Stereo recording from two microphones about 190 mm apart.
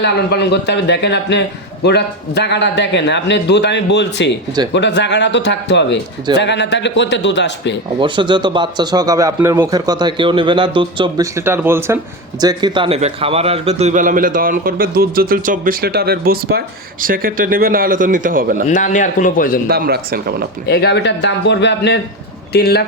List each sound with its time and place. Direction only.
0.0 s a man's voice: 60° left (ahead or behind)
8.0 s speech: 25° right (ahead or behind)
11.3 s a man's voice: 10° right (ahead or behind); by 18.6 s 45° right (ahead or behind)
18.7 s a man's voice: 40° left (ahead or behind)
19.6 s a man's voice: 55° right (ahead or behind)
20.7 s a man's voice: 60° left (ahead or behind)